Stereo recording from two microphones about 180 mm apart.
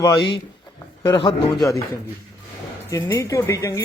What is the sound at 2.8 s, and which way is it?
Speech, 15° left (ahead or behind).